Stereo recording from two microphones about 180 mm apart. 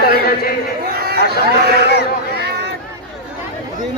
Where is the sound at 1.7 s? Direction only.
65° right (ahead or behind).